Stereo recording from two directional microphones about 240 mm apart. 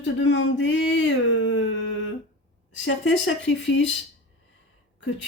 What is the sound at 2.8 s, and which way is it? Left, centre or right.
Speech, left.